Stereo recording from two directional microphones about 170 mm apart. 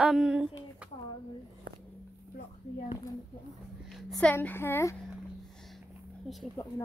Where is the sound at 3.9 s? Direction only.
5° left (ahead or behind).